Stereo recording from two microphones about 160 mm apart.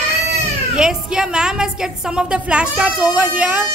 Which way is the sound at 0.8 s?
5° right (ahead or behind).